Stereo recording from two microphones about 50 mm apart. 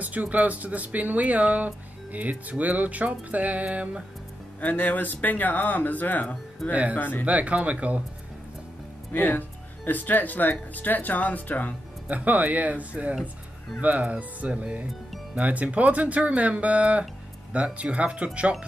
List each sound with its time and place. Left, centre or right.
0.0 s speech: right
4.6 s speech: left
6.7 s speech: right
7.0 s speech: left
7.2 s speech: right
9.1 s speech: left
12.1 s speech: right